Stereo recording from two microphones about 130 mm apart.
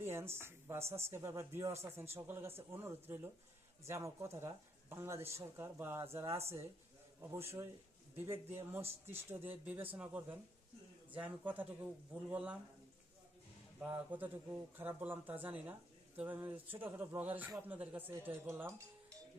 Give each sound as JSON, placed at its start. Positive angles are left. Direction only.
{"t": 0.0, "sound": "a man's voice", "side_deg": -20}
{"t": 13.7, "sound": "speech", "side_deg": -10}